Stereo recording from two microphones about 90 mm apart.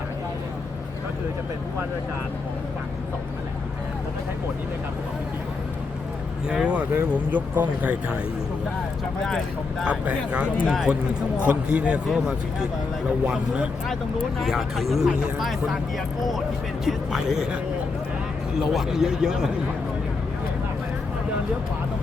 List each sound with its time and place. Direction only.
6.5 s a man's voice: 10° right (ahead or behind)
9.8 s a man's voice: 15° right (ahead or behind)
14.3 s speech: centre (ahead or behind)
16.8 s speech: 5° right (ahead or behind)
18.6 s a man's voice: 5° right (ahead or behind)